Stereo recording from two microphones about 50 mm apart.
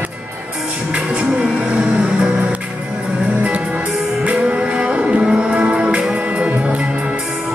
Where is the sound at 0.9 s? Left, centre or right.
Right.